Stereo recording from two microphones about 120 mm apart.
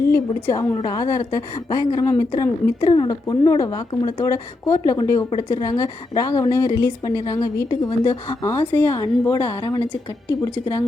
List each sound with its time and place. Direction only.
0.1 s a woman's voice: 25° left (ahead or behind)